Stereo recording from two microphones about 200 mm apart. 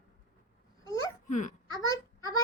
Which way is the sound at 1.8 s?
15° left (ahead or behind).